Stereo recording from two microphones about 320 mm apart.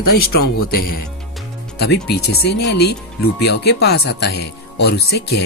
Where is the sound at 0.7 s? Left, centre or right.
Left.